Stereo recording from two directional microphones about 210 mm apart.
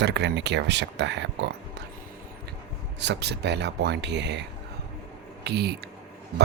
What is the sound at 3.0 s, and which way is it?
Speech, 55° right (ahead or behind).